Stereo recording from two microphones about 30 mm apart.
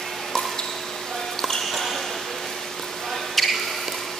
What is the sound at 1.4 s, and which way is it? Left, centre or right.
Music, centre.